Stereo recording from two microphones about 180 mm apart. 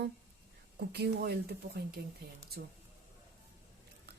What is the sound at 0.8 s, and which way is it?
A woman's voice, 65° right (ahead or behind).